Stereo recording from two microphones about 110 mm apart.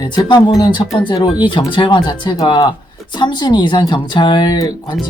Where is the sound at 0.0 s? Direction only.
40° left (ahead or behind).